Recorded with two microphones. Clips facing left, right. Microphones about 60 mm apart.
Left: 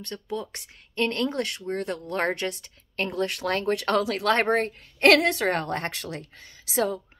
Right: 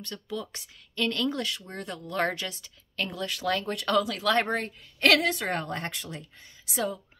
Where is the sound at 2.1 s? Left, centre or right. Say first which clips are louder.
Left 1 dB; left.